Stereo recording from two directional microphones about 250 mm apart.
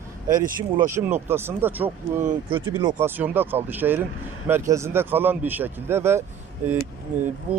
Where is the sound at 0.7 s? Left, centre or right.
Centre.